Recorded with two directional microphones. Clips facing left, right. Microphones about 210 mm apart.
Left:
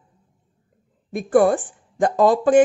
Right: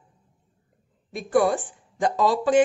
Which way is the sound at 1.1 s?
50° left (ahead or behind).